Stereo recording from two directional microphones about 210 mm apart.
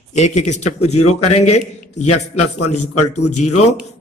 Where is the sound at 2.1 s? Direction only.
90° left.